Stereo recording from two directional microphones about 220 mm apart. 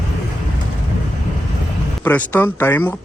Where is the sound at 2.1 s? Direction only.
10° left (ahead or behind).